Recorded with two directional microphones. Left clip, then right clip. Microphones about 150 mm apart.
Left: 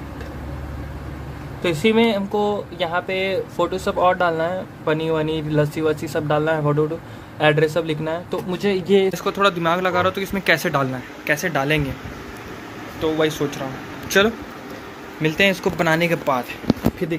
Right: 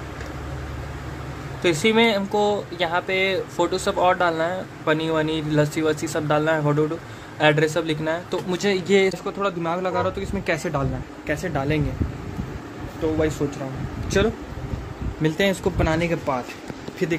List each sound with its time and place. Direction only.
1.6 s speech: 5° right (ahead or behind)
13.2 s speech: 15° right (ahead or behind)
15.8 s speech: 10° right (ahead or behind)